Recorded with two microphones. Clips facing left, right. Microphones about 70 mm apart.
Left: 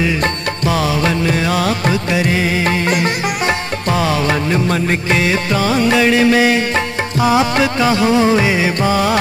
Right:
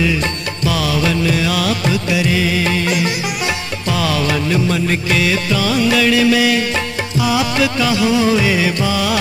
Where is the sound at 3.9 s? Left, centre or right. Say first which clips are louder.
Left 1 dB; left.